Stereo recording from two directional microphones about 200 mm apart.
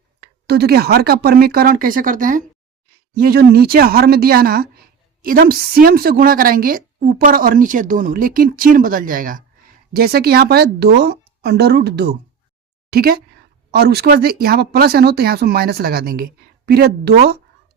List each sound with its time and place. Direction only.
0.2 s speech: 55° right (ahead or behind)